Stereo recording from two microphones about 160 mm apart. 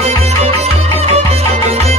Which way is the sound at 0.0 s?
40° right (ahead or behind).